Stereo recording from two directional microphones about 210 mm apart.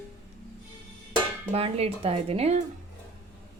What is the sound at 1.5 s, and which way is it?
Speech, 30° right (ahead or behind).